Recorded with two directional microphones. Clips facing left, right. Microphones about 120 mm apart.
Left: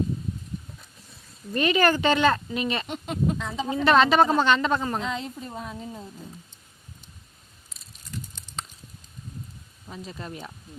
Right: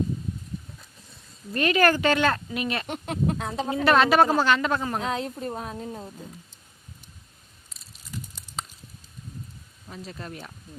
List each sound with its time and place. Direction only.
1.5 s speech: centre (ahead or behind)
2.8 s speech: 55° right (ahead or behind)
3.8 s speech: centre (ahead or behind)
5.4 s speech: 45° right (ahead or behind)
7.7 s a sound: centre (ahead or behind)
9.9 s speech: centre (ahead or behind)